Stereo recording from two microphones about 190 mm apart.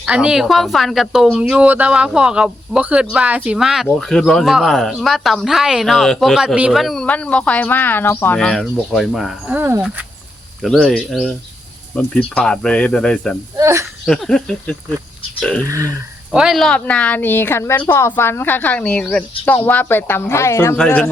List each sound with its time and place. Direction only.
0.0 s speech: 5° right (ahead or behind)
13.6 s speech: 15° right (ahead or behind)
14.1 s speech: 5° left (ahead or behind)
15.6 s speech: 15° right (ahead or behind)
16.3 s a woman's voice: 5° right (ahead or behind); by 20.7 s 15° left (ahead or behind)
20.7 s speech: 5° left (ahead or behind)